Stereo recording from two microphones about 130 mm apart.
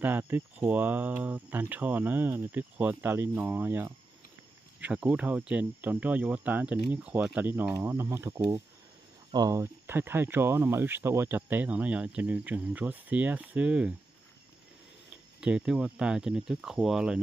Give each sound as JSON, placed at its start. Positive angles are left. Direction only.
{"t": 0.0, "sound": "speech", "side_deg": -15}
{"t": 15.4, "sound": "speech", "side_deg": -5}